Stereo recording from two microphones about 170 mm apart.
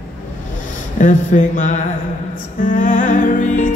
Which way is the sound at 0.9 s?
50° left (ahead or behind).